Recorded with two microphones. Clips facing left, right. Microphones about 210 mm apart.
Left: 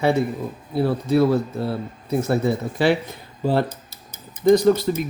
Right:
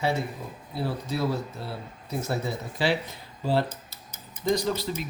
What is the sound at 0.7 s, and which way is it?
Speech, 60° left (ahead or behind).